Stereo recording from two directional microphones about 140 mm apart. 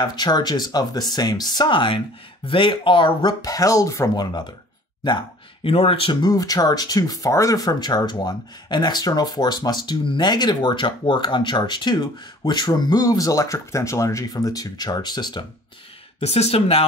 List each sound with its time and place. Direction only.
0.0 s speech: 30° left (ahead or behind)
16.2 s speech: 50° left (ahead or behind)